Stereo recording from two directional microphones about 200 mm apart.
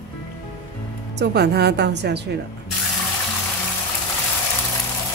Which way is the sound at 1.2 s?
55° right (ahead or behind).